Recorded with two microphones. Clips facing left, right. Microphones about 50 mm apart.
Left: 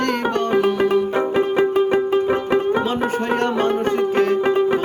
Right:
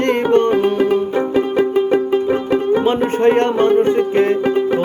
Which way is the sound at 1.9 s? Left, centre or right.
Centre.